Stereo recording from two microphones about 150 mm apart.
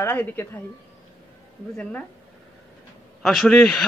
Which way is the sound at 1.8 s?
10° left (ahead or behind).